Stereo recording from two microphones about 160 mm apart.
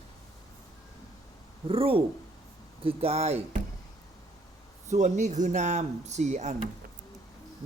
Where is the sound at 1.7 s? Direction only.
35° right (ahead or behind).